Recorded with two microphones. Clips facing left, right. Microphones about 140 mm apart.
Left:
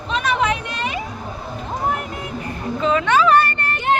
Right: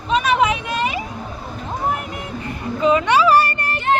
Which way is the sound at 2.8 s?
10° right (ahead or behind).